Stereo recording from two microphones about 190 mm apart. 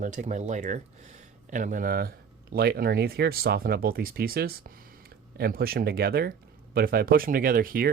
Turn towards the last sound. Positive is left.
turn(degrees=-50)  # may be behind; listen again after turning